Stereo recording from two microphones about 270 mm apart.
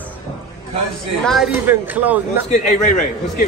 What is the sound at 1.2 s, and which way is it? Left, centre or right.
Speech, centre.